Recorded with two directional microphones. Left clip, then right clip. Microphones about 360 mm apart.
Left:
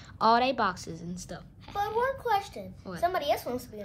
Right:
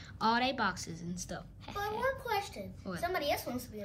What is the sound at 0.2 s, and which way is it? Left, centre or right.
A woman's voice, centre.